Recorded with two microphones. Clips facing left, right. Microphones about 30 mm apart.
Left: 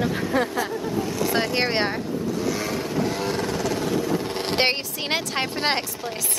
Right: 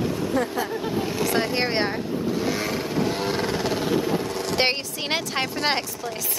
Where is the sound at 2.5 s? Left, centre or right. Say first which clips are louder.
Even; centre.